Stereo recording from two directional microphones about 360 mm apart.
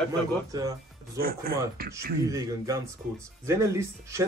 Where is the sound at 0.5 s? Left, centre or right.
Centre.